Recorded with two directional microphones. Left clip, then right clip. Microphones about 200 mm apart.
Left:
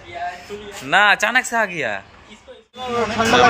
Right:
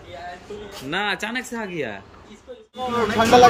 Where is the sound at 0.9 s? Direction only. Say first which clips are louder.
Left 10 dB; 10° right (ahead or behind).